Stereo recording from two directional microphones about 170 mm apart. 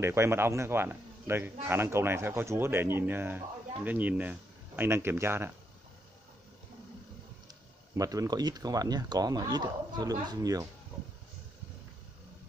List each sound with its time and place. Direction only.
0.0 s a man's voice: 15° right (ahead or behind)
8.0 s speech: 20° right (ahead or behind)